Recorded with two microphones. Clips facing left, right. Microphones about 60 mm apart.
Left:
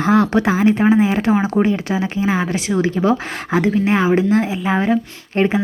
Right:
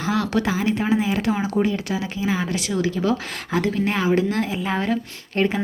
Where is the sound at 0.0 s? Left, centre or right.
Left.